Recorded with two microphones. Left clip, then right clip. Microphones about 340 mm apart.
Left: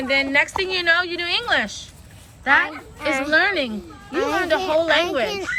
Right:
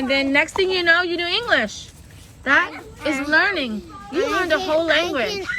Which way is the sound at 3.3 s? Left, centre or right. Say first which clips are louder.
Right 1 dB; centre.